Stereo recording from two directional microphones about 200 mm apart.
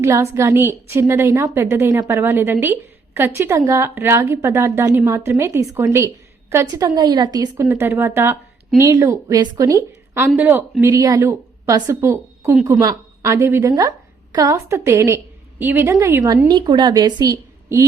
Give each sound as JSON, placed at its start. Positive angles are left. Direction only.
{"t": 0.0, "sound": "a woman's voice", "side_deg": -15}